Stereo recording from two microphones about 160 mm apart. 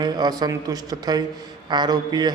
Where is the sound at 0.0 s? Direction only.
25° right (ahead or behind).